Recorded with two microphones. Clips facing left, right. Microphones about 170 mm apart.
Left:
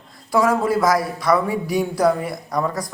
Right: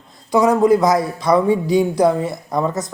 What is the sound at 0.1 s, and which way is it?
Speech, 20° right (ahead or behind).